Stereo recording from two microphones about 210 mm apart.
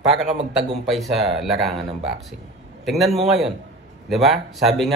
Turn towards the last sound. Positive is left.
turn(degrees=0)  # may be behind; listen again after turning